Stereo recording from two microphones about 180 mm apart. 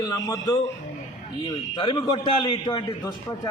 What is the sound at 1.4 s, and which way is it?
A man's voice, 25° left (ahead or behind).